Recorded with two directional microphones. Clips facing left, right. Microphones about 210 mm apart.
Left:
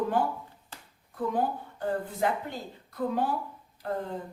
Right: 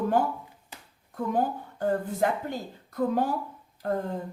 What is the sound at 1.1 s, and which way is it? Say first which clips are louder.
A woman's voice: right 2 dB; 45° right (ahead or behind).